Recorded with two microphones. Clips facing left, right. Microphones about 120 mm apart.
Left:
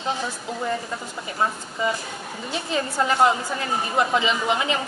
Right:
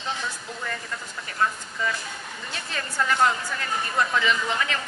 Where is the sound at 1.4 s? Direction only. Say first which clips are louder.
Left 2 dB; 25° left (ahead or behind).